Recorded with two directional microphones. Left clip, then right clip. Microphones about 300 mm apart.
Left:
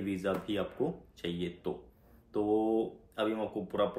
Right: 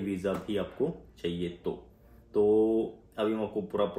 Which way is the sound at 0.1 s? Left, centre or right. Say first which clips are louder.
Right 2 dB; centre.